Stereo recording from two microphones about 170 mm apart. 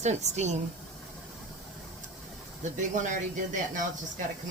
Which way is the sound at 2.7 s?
45° right (ahead or behind).